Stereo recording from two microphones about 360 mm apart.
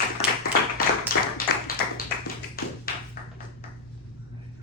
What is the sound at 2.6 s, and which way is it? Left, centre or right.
Tap, left.